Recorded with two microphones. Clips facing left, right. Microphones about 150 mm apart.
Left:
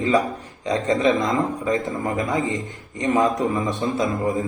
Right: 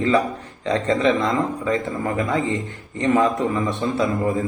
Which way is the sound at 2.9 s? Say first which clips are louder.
Right 1 dB; 15° left (ahead or behind).